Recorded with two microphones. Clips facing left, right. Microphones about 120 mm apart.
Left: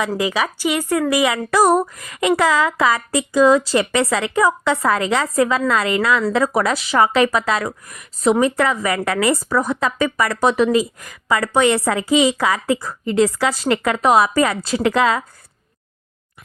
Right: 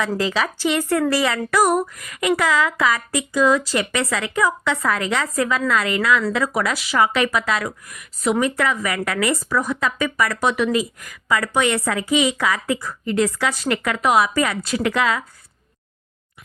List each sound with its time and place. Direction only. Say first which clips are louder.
0.0 s a woman's voice: left 1 dB; 15° left (ahead or behind)
1.5 s a woman's voice: left 3 dB; 30° left (ahead or behind)